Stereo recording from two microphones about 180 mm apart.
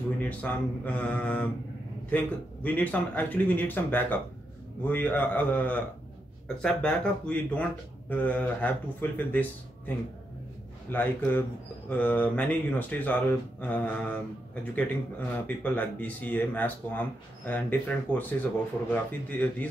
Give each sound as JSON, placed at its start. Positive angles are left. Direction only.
{"t": 0.2, "sound": "speech", "side_deg": 10}